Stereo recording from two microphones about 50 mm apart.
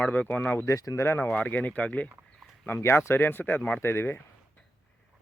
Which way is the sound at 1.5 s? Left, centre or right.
Left.